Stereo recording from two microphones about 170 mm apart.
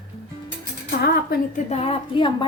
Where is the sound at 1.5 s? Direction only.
40° left (ahead or behind).